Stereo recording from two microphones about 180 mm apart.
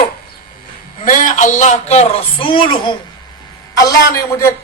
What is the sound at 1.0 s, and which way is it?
A man's voice, 50° left (ahead or behind).